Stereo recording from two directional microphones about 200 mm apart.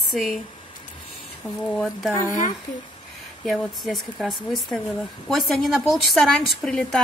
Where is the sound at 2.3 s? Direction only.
40° left (ahead or behind).